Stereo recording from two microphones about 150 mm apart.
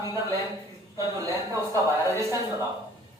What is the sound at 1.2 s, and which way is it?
Speech, 20° right (ahead or behind).